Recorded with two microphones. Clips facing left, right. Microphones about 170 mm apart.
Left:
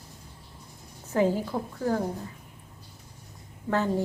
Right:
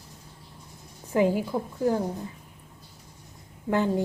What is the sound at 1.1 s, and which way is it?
Speech, 15° right (ahead or behind).